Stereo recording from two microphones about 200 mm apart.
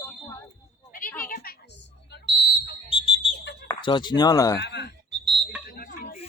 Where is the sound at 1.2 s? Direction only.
45° left (ahead or behind).